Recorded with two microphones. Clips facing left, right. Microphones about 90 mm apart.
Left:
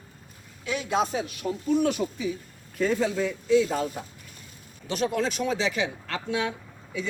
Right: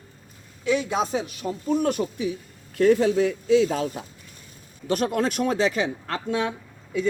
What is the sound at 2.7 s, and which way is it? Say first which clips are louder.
Speech: right 7 dB; 75° right (ahead or behind).